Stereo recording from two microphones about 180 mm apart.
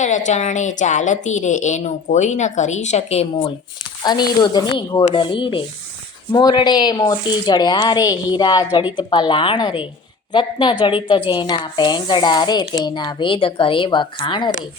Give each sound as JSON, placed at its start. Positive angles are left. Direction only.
{"t": 0.0, "sound": "a woman's voice", "side_deg": 40}
{"t": 4.0, "sound": "speech", "side_deg": 20}